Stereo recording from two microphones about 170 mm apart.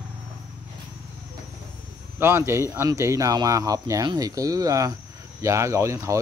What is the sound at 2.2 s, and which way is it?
Speech, 15° right (ahead or behind).